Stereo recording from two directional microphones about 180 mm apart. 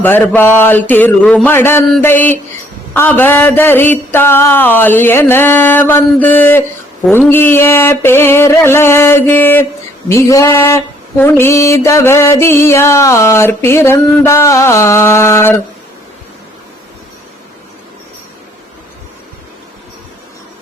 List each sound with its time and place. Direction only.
0.0 s mantra: 10° left (ahead or behind)